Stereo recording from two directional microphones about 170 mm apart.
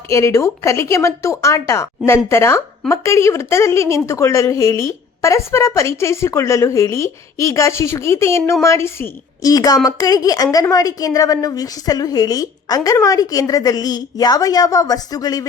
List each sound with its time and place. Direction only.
0.1 s a woman's voice: 15° left (ahead or behind)